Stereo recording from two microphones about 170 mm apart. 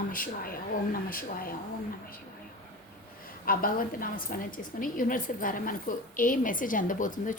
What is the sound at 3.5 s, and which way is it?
A woman's voice, 55° left (ahead or behind).